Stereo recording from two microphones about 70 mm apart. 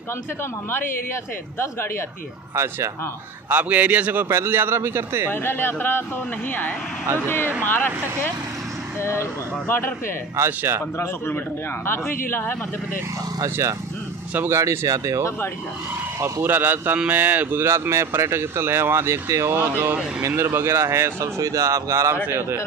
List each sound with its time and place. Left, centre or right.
0.4 s speech: left
2.5 s speech: right
3.4 s a man's voice: right
4.3 s speech: right
5.3 s speech: left
7.2 s speech: left
10.4 s speech: right
11.3 s speech: left
13.4 s speech: right
14.9 s speech: right
16.2 s a man's voice: right
17.6 s speech: right
21.4 s speech: right
22.1 s speech: right